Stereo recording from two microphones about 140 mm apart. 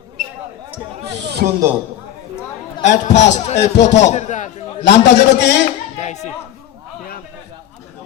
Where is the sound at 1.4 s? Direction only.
90° right.